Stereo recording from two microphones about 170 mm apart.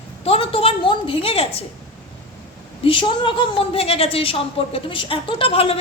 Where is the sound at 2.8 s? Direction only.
30° left (ahead or behind).